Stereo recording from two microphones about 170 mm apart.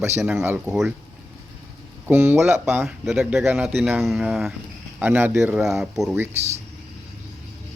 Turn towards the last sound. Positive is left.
turn(degrees=-40)  # may be behind; listen again after turning